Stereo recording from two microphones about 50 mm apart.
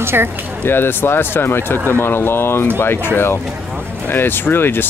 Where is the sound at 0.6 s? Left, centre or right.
Left.